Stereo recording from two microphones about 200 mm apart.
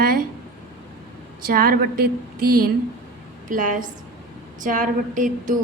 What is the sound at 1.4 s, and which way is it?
A woman's voice, 45° right (ahead or behind).